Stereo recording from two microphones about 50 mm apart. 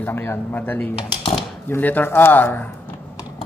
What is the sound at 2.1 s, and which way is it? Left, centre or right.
Speech, left.